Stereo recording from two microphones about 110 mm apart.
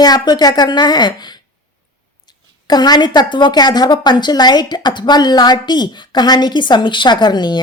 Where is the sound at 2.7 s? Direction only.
40° left (ahead or behind).